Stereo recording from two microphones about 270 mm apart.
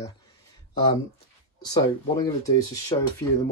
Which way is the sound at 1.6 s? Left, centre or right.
Centre.